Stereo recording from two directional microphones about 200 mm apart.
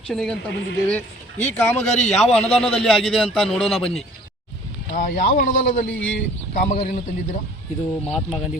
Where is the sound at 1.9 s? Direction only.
35° left (ahead or behind).